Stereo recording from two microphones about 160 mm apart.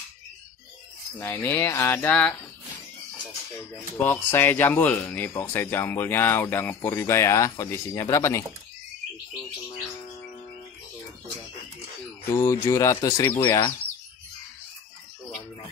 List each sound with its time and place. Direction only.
1.2 s speech: 15° left (ahead or behind)
3.9 s speech: 15° left (ahead or behind)
12.3 s speech: 20° left (ahead or behind)